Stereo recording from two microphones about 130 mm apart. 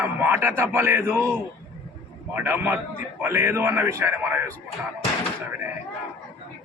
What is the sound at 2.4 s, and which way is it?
A man's voice, 15° right (ahead or behind).